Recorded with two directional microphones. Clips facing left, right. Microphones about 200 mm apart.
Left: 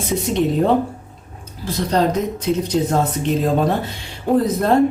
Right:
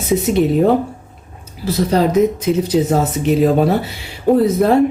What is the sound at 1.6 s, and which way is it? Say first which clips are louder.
Speech: right 3 dB; 10° right (ahead or behind).